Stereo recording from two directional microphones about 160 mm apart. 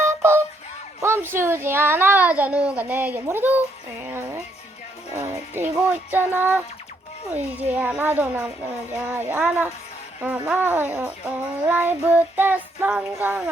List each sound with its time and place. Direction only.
0.0 s emergency vehicle: 15° right (ahead or behind)
1.0 s speech: 15° right (ahead or behind)